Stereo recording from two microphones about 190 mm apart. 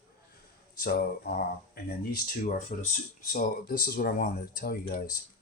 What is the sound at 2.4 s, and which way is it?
Speech, 40° left (ahead or behind).